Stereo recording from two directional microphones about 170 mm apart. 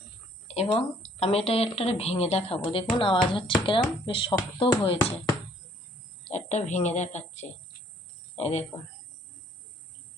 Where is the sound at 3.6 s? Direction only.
30° left (ahead or behind).